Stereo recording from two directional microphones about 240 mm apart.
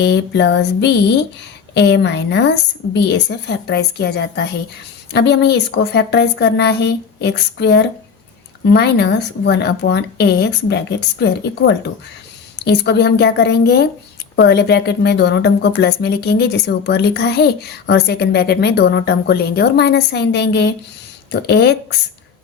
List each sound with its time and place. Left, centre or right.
0.0 s a woman's voice: left